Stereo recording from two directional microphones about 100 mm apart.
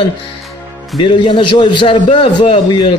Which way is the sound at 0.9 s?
60° left (ahead or behind).